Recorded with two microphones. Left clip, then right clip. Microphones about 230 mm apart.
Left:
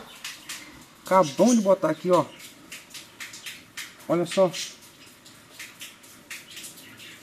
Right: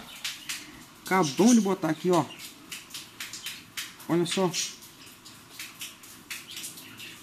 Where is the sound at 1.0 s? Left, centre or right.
Centre.